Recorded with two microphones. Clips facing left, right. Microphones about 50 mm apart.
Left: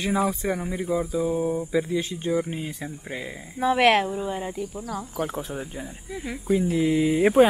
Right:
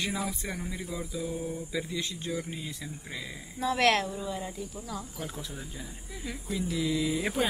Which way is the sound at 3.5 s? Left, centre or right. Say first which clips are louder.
Left 6 dB; centre.